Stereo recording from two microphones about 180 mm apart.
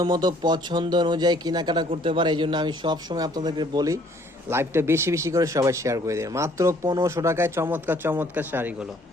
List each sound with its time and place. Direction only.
0.0 s speech: 25° right (ahead or behind)